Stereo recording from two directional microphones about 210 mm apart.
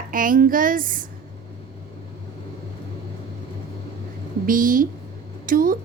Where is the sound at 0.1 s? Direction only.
40° right (ahead or behind).